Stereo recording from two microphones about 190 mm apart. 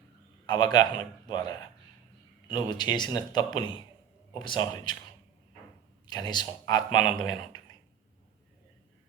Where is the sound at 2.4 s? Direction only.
25° left (ahead or behind).